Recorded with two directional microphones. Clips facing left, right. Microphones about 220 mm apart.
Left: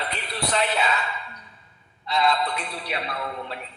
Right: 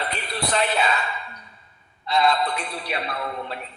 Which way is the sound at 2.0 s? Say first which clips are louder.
Right 2 dB; 50° right (ahead or behind).